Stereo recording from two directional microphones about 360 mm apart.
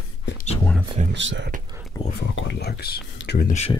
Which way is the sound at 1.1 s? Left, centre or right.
Right.